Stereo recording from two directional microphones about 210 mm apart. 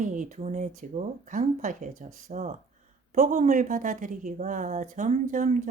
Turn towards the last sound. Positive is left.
turn(degrees=-35)  # may be behind; listen again after turning